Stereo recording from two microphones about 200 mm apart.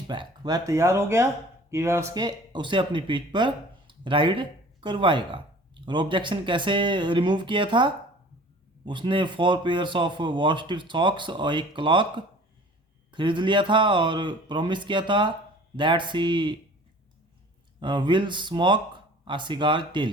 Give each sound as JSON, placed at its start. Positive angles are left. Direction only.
{"t": 0.1, "sound": "speech", "side_deg": -20}
{"t": 17.7, "sound": "speech", "side_deg": -25}